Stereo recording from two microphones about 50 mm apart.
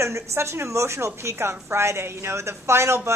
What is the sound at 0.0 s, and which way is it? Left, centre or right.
Speech, right.